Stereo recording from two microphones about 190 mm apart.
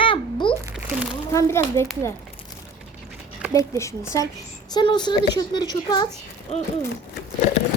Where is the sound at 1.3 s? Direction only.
15° left (ahead or behind).